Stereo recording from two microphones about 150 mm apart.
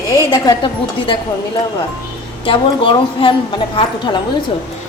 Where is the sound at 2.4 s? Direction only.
35° left (ahead or behind).